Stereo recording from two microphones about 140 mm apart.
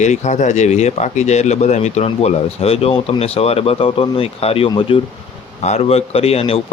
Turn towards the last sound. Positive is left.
turn(degrees=45)  # may be behind; listen again after turning